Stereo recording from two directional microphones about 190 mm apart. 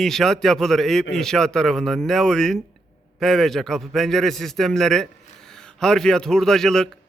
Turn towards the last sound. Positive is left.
turn(degrees=5)  # may be behind; listen again after turning